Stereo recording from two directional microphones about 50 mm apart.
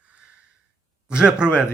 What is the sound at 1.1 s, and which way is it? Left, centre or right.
Speech, centre.